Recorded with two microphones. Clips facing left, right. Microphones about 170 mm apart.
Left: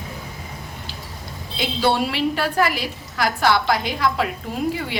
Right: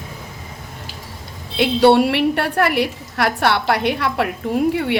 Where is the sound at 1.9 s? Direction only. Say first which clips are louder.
Right 6 dB; 65° right (ahead or behind).